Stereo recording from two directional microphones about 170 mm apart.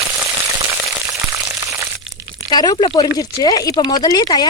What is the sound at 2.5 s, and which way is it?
Speech, 25° left (ahead or behind).